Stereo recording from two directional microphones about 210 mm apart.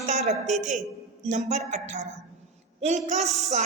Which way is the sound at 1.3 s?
35° right (ahead or behind).